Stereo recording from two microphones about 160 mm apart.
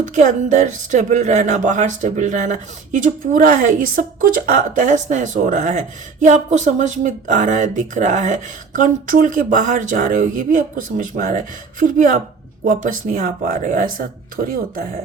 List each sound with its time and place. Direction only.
0.1 s a woman's voice: 50° right (ahead or behind); by 14.8 s 65° right (ahead or behind)